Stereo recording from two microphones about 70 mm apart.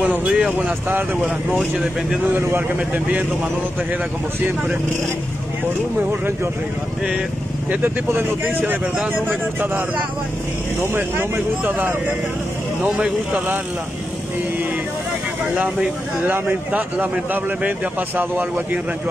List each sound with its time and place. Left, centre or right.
0.0 s a sound: centre
1.6 s speech: centre
2.3 s speech: right
7.8 s speech: right
12.8 s speech: centre
15.5 s speech: centre